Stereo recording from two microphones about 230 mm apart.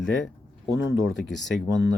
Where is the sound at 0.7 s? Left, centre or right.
Left.